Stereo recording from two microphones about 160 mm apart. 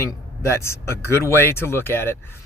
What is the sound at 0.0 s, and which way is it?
Speech, 15° left (ahead or behind).